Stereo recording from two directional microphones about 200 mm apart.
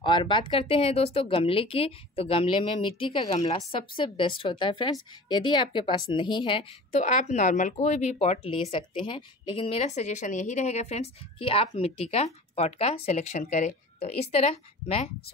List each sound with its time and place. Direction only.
0.0 s a woman's voice: 25° left (ahead or behind)